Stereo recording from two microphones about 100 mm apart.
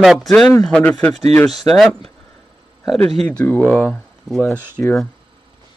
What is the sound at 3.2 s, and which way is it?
Speech, 15° left (ahead or behind).